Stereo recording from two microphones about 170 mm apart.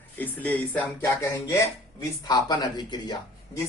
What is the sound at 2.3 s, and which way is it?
Speech, 25° left (ahead or behind).